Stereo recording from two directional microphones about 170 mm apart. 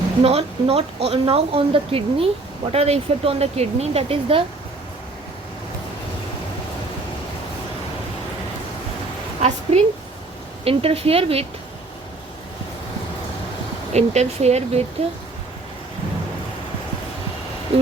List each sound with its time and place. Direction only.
0.2 s speech: 35° right (ahead or behind)
9.7 s speech: 40° right (ahead or behind)
13.9 s speech: 40° right (ahead or behind)